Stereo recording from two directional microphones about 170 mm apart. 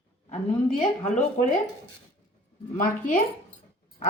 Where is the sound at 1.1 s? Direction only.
45° left (ahead or behind).